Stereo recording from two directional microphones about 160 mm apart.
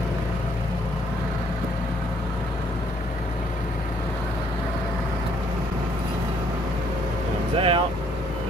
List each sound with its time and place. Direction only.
7.5 s vehicle: 35° right (ahead or behind)